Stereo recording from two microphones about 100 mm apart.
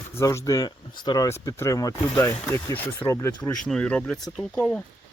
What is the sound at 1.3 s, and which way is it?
Speech, 30° left (ahead or behind).